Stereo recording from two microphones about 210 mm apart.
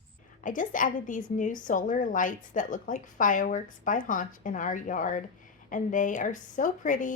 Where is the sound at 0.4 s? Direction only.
40° left (ahead or behind).